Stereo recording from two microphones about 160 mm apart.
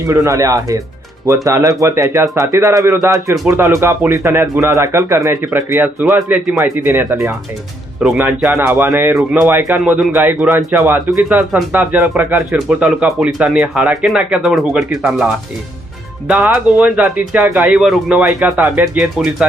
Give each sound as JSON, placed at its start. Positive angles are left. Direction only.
{"t": 0.1, "sound": "speech", "side_deg": -20}
{"t": 8.0, "sound": "speech", "side_deg": -5}